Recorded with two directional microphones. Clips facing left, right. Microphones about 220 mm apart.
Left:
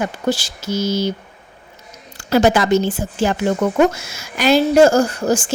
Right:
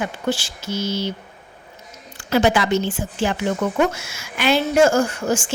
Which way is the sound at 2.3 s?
40° left (ahead or behind).